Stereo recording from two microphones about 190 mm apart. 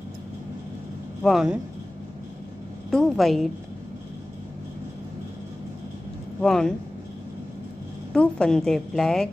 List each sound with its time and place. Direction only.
1.2 s a woman's voice: centre (ahead or behind)
2.9 s a woman's voice: centre (ahead or behind)
6.4 s a woman's voice: centre (ahead or behind)
8.1 s a woman's voice: 5° left (ahead or behind)